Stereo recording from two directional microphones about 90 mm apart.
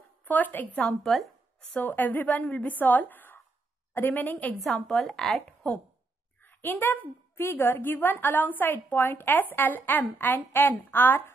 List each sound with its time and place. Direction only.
0.2 s a woman's voice: 20° left (ahead or behind)
0.8 s a woman's voice: 5° left (ahead or behind)
1.7 s a woman's voice: 20° left (ahead or behind)
6.4 s a woman's voice: 20° left (ahead or behind)